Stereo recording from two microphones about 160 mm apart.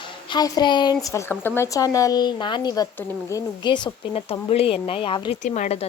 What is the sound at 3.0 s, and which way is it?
Speech, 15° left (ahead or behind).